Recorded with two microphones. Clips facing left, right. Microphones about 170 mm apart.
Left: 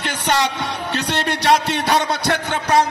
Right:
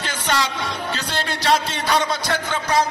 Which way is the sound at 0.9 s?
65° left (ahead or behind).